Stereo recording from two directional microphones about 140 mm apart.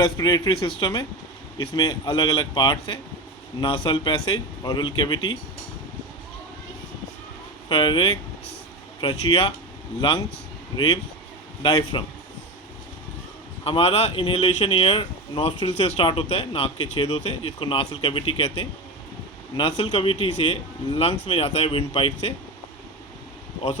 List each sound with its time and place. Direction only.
0.0 s a man's voice: 30° left (ahead or behind)
7.7 s a man's voice: 35° left (ahead or behind)
10.8 s a man's voice: 30° left (ahead or behind)
13.7 s speech: 45° left (ahead or behind)